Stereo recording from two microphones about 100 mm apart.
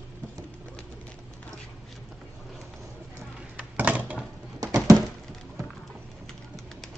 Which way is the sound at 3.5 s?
15° right (ahead or behind).